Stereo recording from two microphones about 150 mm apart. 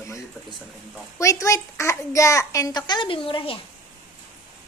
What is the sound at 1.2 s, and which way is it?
A child's voice, 20° left (ahead or behind).